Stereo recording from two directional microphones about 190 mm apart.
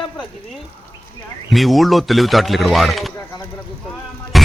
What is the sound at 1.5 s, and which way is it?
Speech, centre (ahead or behind).